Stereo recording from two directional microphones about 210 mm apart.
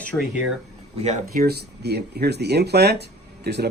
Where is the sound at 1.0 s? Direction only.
40° right (ahead or behind).